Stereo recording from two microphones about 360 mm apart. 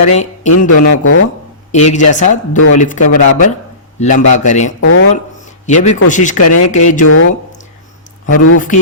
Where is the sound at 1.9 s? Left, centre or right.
Centre.